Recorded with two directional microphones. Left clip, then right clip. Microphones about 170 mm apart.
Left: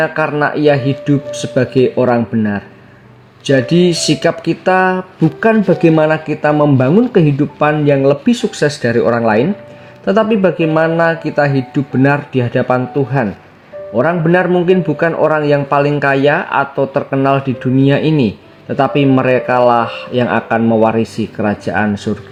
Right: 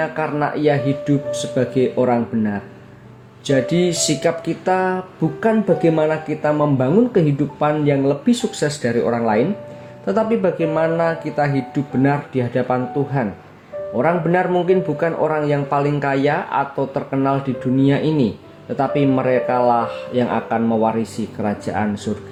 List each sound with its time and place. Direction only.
0.0 s a man's voice: 40° left (ahead or behind)